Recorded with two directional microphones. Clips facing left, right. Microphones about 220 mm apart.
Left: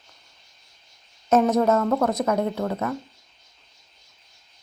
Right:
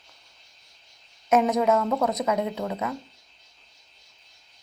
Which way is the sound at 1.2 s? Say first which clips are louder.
Left 2 dB; 15° right (ahead or behind).